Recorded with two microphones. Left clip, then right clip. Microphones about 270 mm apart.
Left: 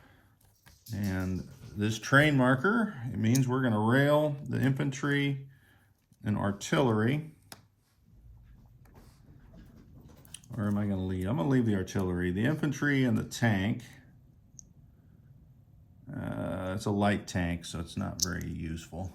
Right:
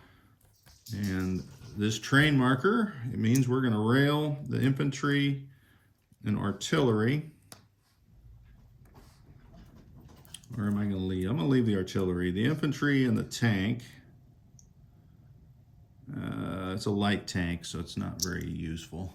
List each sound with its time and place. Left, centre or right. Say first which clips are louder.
0.9 s typing: right 1 dB; centre
1.8 s speech: left 1 dB; centre
10.5 s speech: even; centre
16.0 s speech: left 1 dB; centre